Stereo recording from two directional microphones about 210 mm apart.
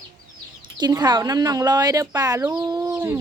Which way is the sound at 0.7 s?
20° right (ahead or behind).